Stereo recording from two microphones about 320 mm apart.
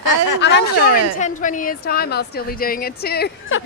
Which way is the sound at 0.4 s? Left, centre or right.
Left.